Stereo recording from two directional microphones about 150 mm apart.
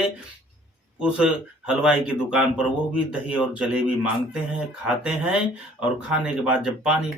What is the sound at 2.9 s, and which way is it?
Speech, 5° right (ahead or behind).